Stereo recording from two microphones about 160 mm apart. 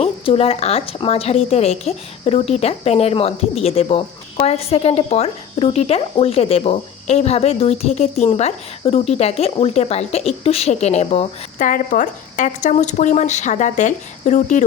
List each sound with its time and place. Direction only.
0.0 s a woman's voice: 40° left (ahead or behind)
11.6 s speech: 55° left (ahead or behind)